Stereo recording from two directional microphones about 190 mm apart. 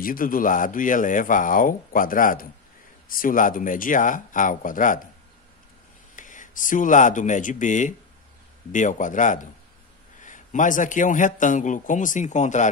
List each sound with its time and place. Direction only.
0.0 s speech: 50° left (ahead or behind)
6.1 s a man's voice: 45° left (ahead or behind)